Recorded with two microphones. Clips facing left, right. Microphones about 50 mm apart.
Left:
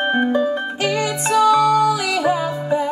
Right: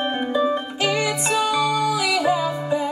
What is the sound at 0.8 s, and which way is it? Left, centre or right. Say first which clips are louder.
Music: left 1 dB; left.